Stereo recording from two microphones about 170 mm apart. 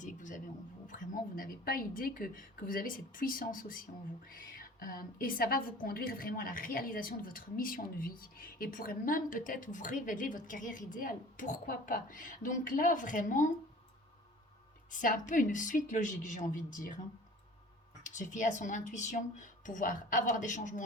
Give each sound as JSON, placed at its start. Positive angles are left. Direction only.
{"t": 0.0, "sound": "a sound", "side_deg": 50}
{"t": 0.9, "sound": "a woman's voice", "side_deg": 50}
{"t": 14.8, "sound": "speech", "side_deg": 50}
{"t": 18.0, "sound": "speech", "side_deg": 45}